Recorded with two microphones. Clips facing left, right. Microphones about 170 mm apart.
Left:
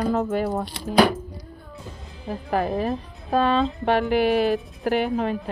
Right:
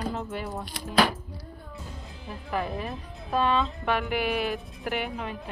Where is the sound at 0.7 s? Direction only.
30° left (ahead or behind).